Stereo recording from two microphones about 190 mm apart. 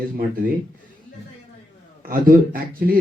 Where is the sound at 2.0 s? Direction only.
50° right (ahead or behind).